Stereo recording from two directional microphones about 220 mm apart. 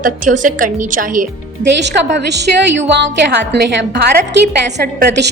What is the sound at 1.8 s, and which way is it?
A woman's voice, 50° right (ahead or behind).